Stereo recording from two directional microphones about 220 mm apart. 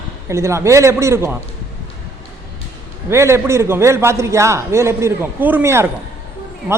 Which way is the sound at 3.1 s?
10° right (ahead or behind).